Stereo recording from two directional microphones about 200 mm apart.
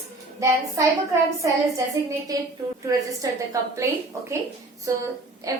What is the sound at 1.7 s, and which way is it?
A woman's voice, 15° right (ahead or behind).